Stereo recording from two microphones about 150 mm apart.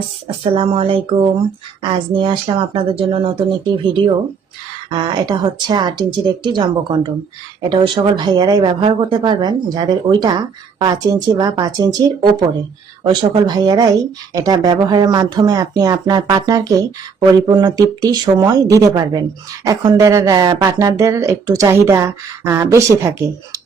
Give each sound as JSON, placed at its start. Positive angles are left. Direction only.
{"t": 0.5, "sound": "speech", "side_deg": -40}